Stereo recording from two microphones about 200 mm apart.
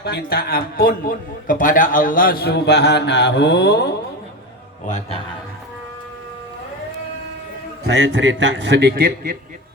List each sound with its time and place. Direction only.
0.0 s a man's voice: 50° left (ahead or behind)
4.9 s a man's voice: 35° left (ahead or behind)
7.9 s a man's voice: 60° right (ahead or behind)